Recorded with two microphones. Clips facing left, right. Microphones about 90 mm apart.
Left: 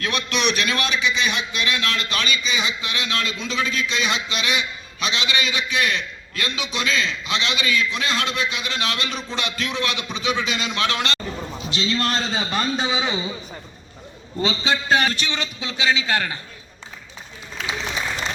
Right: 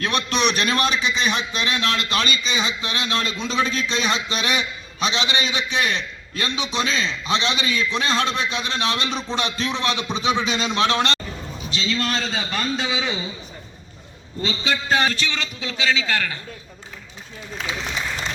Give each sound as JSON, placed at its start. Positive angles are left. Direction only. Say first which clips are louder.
{"t": 0.0, "sound": "a man's voice", "louder": "right 2 dB", "side_deg": -35}
{"t": 11.9, "sound": "a man's voice", "louder": "left 1 dB", "side_deg": 25}
{"t": 14.4, "sound": "a man's voice", "louder": "left 2 dB", "side_deg": 25}